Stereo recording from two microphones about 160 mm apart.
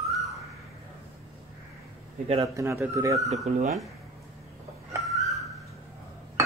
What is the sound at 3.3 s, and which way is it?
Speech, 45° right (ahead or behind).